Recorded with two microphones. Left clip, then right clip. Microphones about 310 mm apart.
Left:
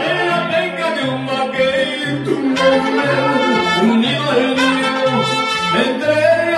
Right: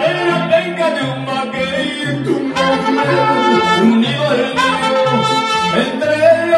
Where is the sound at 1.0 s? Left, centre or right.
Centre.